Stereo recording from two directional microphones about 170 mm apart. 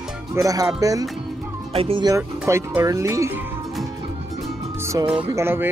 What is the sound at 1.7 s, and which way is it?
Speech, 35° right (ahead or behind).